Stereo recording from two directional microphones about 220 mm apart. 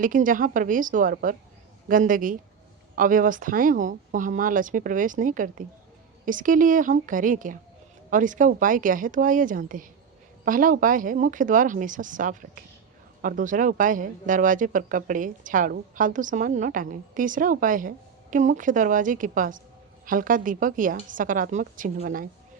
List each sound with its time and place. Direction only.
0.0 s speech: 35° right (ahead or behind)